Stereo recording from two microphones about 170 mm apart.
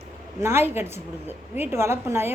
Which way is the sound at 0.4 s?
15° right (ahead or behind).